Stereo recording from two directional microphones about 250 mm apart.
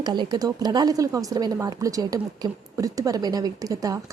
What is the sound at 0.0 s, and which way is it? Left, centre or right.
A woman's voice, centre.